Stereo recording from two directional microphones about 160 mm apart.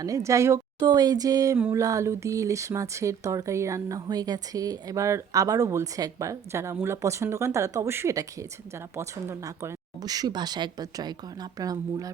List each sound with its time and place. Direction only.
0.0 s speech: 20° right (ahead or behind)